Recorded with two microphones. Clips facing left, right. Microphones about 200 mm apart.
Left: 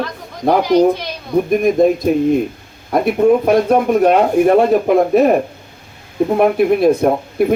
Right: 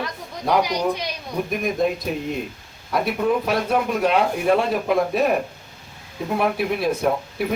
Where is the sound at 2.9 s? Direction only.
50° left (ahead or behind).